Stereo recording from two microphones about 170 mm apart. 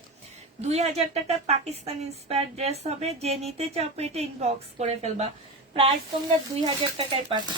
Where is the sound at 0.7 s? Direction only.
40° right (ahead or behind).